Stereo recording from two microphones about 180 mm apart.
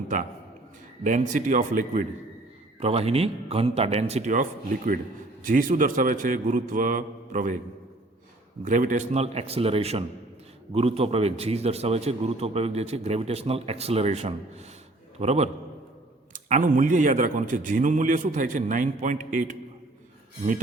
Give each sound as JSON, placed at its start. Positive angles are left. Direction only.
{"t": 1.0, "sound": "a man's voice", "side_deg": -45}
{"t": 2.8, "sound": "a man's voice", "side_deg": -35}
{"t": 8.6, "sound": "a man's voice", "side_deg": -45}